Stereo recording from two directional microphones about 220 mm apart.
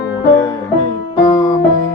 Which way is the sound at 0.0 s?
15° left (ahead or behind).